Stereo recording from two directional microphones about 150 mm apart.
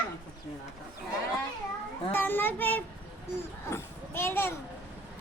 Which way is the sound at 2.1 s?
15° left (ahead or behind).